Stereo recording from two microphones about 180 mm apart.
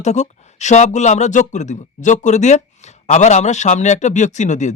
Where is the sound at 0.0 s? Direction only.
40° left (ahead or behind).